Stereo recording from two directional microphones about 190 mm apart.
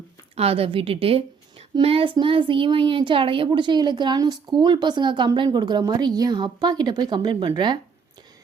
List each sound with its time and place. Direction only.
0.3 s a woman's voice: 30° right (ahead or behind)